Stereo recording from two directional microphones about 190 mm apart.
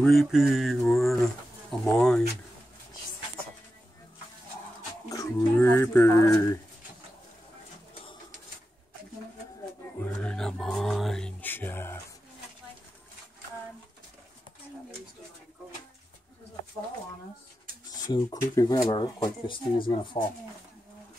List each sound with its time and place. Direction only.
0.0 s mantra: centre (ahead or behind)
5.1 s speech: 15° left (ahead or behind)
10.1 s a sound: 5° left (ahead or behind)
17.9 s speech: 20° left (ahead or behind)